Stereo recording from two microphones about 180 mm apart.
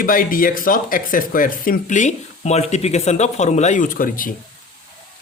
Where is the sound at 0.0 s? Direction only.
50° left (ahead or behind).